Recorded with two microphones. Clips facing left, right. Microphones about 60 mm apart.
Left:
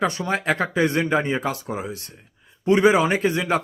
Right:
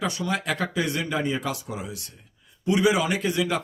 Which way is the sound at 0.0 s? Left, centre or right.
Left.